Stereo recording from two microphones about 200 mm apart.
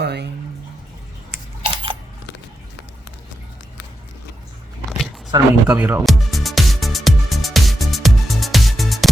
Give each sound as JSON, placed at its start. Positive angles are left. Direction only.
{"t": 0.0, "sound": "bathtub", "side_deg": -55}
{"t": 1.6, "sound": "a sound", "side_deg": -25}
{"t": 5.3, "sound": "speech", "side_deg": -20}
{"t": 5.6, "sound": "music", "side_deg": -10}